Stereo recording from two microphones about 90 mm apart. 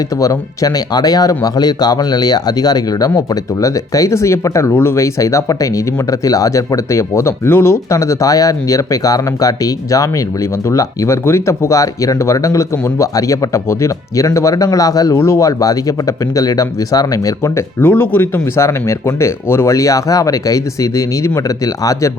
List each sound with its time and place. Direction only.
0.2 s speech: 40° left (ahead or behind)